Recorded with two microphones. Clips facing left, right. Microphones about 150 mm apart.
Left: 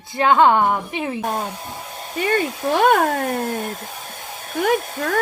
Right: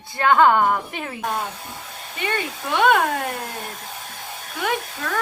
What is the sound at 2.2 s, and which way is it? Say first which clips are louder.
Speech: left 6 dB; 40° left (ahead or behind).